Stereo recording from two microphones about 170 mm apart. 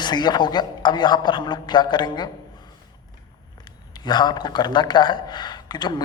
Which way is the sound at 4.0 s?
25° left (ahead or behind).